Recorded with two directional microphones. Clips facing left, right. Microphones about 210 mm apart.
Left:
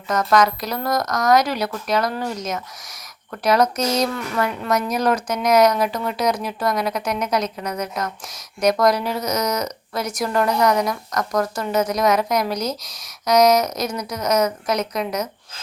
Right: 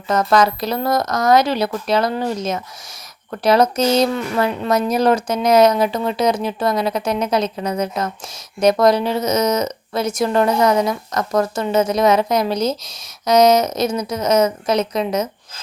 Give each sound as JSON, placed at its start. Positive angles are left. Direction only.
{"t": 0.1, "sound": "speech", "side_deg": -30}